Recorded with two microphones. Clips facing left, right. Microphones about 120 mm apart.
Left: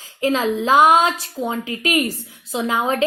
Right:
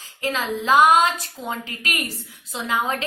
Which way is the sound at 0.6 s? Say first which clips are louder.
Left 1 dB; 20° left (ahead or behind).